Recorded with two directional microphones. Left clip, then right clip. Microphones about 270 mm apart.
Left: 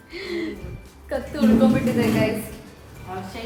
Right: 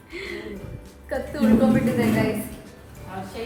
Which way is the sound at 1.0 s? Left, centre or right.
Centre.